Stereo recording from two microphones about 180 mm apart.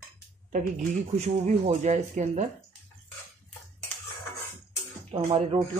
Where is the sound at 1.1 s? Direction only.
40° right (ahead or behind).